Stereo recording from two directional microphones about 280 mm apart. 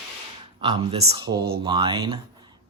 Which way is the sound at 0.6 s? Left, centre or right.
Centre.